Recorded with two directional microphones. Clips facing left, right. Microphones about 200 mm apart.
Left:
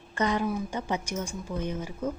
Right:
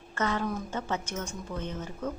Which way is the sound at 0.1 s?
15° left (ahead or behind).